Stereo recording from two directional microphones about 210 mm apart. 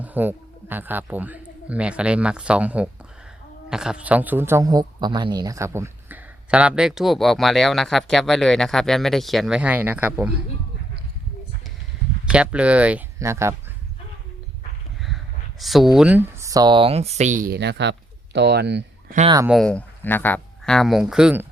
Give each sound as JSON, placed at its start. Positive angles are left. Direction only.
{"t": 0.0, "sound": "a man's voice", "side_deg": -10}
{"t": 12.2, "sound": "a man's voice", "side_deg": -5}
{"t": 15.0, "sound": "speech", "side_deg": 0}
{"t": 19.5, "sound": "a man's voice", "side_deg": 0}